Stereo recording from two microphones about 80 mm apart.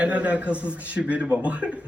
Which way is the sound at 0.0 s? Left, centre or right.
Centre.